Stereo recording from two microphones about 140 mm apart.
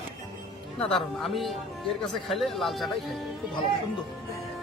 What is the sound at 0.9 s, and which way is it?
Speech, centre (ahead or behind).